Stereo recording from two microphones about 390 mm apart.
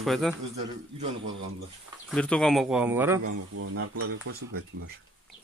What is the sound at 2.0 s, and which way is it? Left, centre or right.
A man's voice, centre.